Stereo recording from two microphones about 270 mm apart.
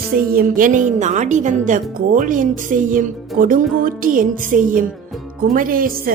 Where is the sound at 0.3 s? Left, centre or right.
Right.